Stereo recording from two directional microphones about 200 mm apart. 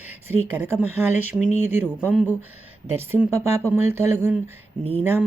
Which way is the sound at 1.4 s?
35° left (ahead or behind).